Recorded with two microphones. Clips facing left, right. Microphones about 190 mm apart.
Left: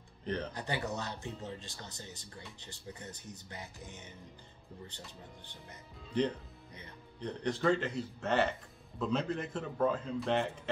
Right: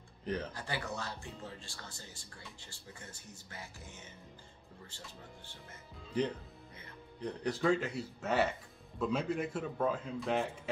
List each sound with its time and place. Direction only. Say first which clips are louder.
0.2 s speech: left 1 dB; 5° right (ahead or behind)
0.5 s speech: left 3 dB; 20° left (ahead or behind)
7.2 s speech: even; 5° right (ahead or behind)